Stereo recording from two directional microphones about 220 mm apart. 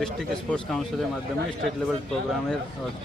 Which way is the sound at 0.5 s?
Centre (ahead or behind).